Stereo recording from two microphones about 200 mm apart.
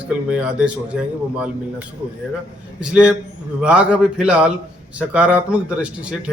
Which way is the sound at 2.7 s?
5° right (ahead or behind).